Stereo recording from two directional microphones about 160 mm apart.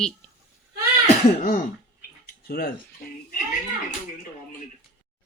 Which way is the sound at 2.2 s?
75° left (ahead or behind).